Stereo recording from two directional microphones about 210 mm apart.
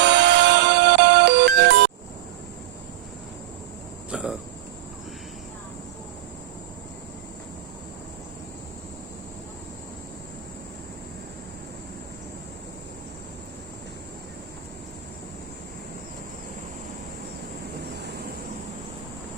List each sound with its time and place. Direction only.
0.0 s music: 55° right (ahead or behind)
4.1 s cricket: 5° right (ahead or behind)
17.9 s vehicle: 50° right (ahead or behind)